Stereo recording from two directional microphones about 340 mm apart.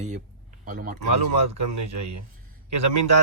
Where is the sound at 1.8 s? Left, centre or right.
Right.